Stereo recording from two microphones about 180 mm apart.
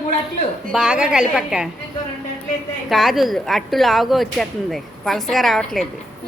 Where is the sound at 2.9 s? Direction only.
Centre (ahead or behind).